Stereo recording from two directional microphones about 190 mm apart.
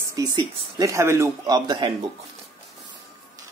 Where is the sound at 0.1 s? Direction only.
20° right (ahead or behind).